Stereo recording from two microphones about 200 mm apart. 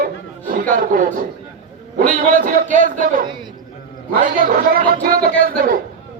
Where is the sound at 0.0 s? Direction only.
40° right (ahead or behind).